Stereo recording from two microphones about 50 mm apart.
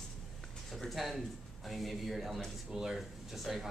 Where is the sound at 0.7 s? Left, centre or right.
Centre.